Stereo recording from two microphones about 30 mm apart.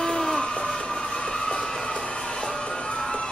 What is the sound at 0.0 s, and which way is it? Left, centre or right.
Music, centre.